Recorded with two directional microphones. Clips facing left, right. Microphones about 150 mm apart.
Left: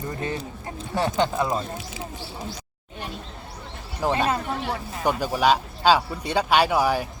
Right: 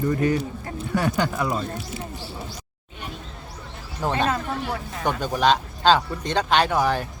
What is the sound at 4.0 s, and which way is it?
Speech, 10° left (ahead or behind).